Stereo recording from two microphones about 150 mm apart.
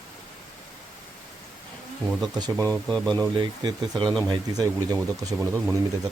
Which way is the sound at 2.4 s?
25° right (ahead or behind).